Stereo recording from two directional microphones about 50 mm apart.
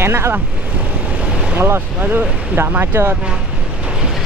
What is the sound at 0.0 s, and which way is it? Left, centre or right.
Speech, right.